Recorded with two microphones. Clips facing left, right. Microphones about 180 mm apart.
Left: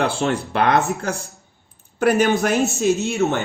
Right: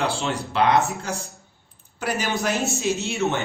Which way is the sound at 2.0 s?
55° left (ahead or behind).